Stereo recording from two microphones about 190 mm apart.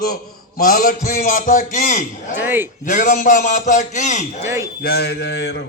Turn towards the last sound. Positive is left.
turn(degrees=65)  # may be behind; listen again after turning